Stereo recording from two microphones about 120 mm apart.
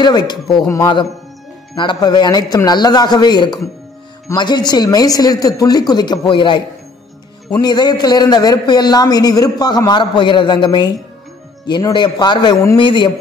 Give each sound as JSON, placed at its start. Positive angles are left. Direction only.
{"t": 0.0, "sound": "a man's voice", "side_deg": 35}
{"t": 1.8, "sound": "a man's voice", "side_deg": 35}
{"t": 7.6, "sound": "a man's voice", "side_deg": 35}